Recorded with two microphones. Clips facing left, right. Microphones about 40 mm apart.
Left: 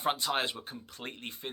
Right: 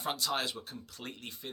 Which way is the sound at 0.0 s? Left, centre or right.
Left.